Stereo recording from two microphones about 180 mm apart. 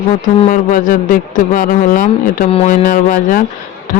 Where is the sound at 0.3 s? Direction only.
45° left (ahead or behind).